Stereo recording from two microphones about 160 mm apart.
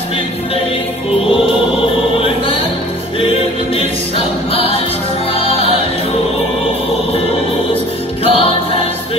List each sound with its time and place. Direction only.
3.2 s music: 35° left (ahead or behind)
8.2 s music: 35° left (ahead or behind)